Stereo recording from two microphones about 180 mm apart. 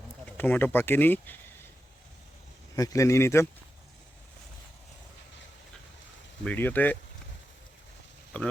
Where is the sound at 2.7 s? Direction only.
20° left (ahead or behind).